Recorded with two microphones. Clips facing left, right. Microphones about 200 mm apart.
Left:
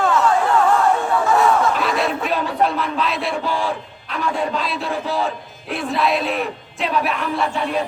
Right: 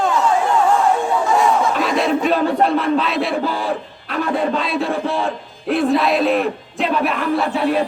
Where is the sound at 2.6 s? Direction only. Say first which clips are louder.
Right 4 dB; centre (ahead or behind).